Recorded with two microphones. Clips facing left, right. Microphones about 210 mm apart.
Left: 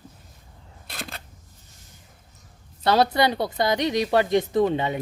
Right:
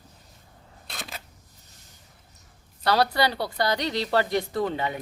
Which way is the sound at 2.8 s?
20° left (ahead or behind).